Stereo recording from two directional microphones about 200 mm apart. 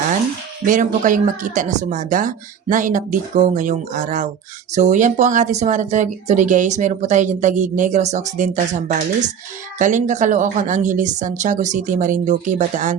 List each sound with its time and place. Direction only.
0.6 s speech: 40° right (ahead or behind)